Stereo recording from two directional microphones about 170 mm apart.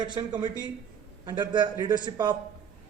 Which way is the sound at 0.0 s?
25° right (ahead or behind).